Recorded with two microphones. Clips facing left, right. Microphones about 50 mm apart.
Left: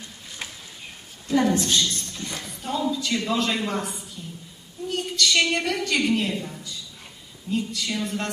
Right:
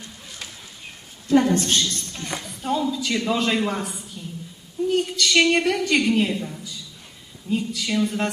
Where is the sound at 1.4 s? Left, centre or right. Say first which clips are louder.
Right 1 dB; right.